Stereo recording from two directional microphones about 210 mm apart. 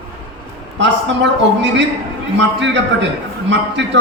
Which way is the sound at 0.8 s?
55° right (ahead or behind).